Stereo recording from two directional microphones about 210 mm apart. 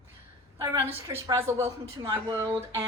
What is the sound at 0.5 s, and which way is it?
A woman's voice, 10° right (ahead or behind).